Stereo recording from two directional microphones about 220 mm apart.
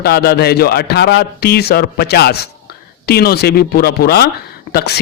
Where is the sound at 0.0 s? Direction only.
45° left (ahead or behind).